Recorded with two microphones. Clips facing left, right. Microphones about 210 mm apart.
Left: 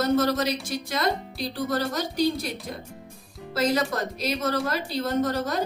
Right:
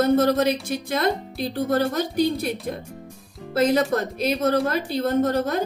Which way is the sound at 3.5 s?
55° right (ahead or behind).